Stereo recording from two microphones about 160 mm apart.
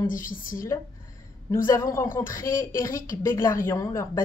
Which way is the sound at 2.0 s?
60° left (ahead or behind).